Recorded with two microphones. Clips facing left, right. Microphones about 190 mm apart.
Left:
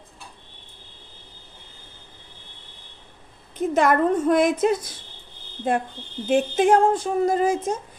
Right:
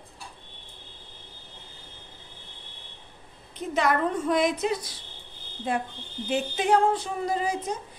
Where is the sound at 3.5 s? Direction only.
50° left (ahead or behind).